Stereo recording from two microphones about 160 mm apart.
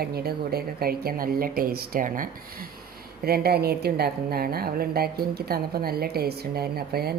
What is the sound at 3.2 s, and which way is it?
A woman's voice, 75° right (ahead or behind).